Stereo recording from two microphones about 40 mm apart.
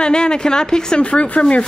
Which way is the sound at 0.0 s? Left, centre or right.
Left.